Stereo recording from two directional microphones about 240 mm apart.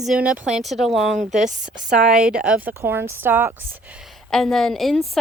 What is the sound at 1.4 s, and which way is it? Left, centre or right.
Speech, right.